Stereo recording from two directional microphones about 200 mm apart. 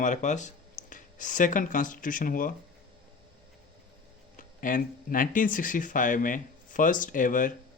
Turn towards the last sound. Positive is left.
turn(degrees=40)  # may be behind; listen again after turning